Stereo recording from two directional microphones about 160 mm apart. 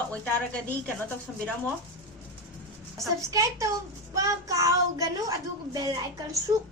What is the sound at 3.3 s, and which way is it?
Speech, 20° right (ahead or behind).